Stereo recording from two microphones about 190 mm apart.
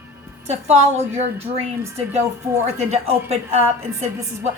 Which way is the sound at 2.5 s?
10° right (ahead or behind).